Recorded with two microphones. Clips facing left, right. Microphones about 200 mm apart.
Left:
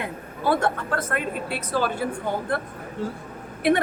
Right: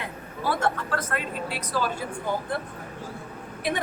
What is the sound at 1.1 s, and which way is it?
Speech, 55° left (ahead or behind).